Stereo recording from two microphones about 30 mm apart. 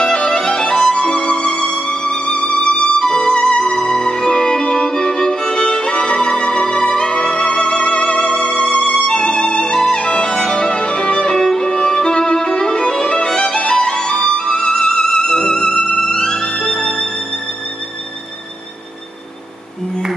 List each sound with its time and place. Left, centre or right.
0.0 s music: left
1.0 s music: left
9.1 s music: left
11.3 s music: centre
11.6 s violin: left
16.1 s music: left